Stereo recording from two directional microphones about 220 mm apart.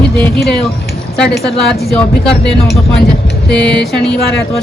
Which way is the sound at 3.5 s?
5° left (ahead or behind).